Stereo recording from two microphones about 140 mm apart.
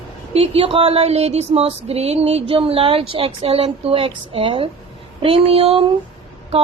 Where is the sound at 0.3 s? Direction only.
45° right (ahead or behind).